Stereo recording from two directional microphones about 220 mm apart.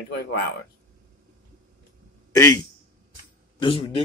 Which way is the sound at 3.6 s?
25° left (ahead or behind).